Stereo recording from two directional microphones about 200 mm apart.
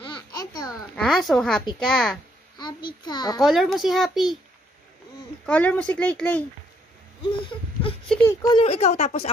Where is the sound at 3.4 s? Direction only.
Centre (ahead or behind).